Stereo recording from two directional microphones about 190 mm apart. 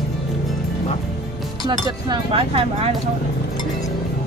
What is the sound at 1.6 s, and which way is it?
Chink, 20° right (ahead or behind).